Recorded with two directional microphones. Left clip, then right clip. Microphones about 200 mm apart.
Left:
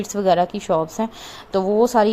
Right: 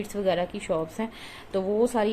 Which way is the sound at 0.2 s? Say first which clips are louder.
Left 9 dB; 30° left (ahead or behind).